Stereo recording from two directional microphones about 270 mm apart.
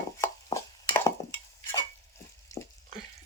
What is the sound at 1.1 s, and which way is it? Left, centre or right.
Dishes, centre.